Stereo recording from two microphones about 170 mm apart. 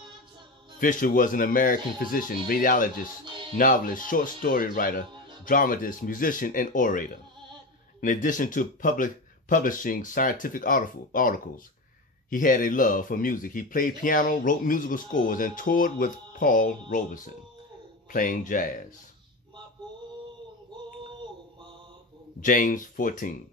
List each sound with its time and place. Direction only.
0.7 s speech: 50° left (ahead or behind)
22.4 s speech: 55° left (ahead or behind)